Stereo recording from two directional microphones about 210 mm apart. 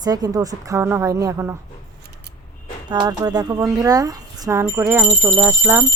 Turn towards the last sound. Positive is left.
turn(degrees=-10)  # may be behind; listen again after turning